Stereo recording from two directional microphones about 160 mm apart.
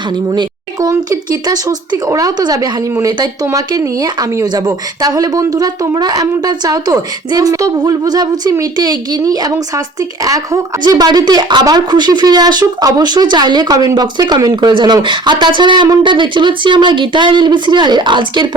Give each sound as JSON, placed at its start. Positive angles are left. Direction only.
{"t": 0.3, "sound": "a woman's voice", "side_deg": -25}